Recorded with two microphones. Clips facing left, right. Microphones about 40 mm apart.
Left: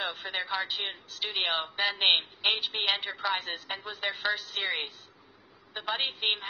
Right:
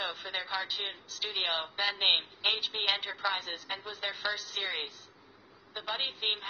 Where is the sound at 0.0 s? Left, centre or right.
Centre.